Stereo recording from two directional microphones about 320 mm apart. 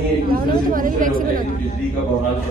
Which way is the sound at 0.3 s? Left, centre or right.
Right.